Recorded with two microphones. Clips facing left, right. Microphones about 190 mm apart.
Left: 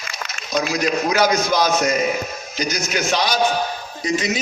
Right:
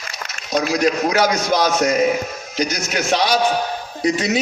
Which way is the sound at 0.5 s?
40° right (ahead or behind).